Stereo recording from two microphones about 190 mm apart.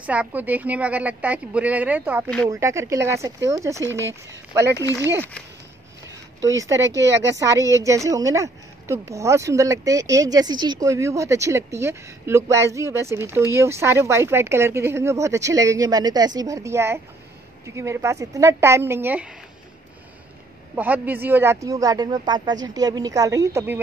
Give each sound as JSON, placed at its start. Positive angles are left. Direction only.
{"t": 0.0, "sound": "a woman's voice", "side_deg": -5}
{"t": 2.2, "sound": "speech", "side_deg": 5}
{"t": 2.5, "sound": "a woman's voice", "side_deg": -15}
{"t": 6.4, "sound": "a woman's voice", "side_deg": -15}
{"t": 7.0, "sound": "speech", "side_deg": -70}
{"t": 7.3, "sound": "a woman's voice", "side_deg": -15}
{"t": 20.7, "sound": "a woman's voice", "side_deg": -10}